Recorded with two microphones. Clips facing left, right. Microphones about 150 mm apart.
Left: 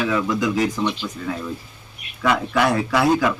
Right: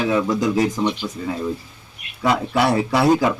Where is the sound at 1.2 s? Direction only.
10° right (ahead or behind).